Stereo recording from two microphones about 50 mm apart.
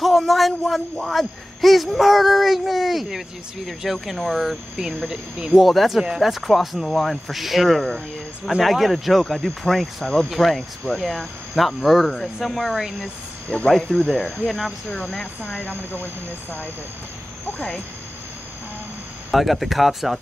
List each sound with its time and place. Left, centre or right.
0.0 s a man's voice: centre
4.7 s speech: centre
5.5 s a man's voice: centre
9.2 s speech: centre
9.6 s a man's voice: centre
13.5 s speech: centre
13.8 s speech: left
15.4 s speech: left
19.3 s a man's voice: centre